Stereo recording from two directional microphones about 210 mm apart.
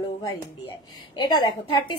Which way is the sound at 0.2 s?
20° left (ahead or behind).